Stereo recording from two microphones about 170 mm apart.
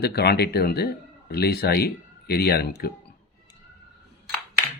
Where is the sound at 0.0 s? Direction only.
70° left (ahead or behind).